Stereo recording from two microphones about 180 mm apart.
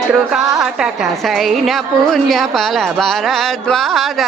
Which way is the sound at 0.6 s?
5° right (ahead or behind).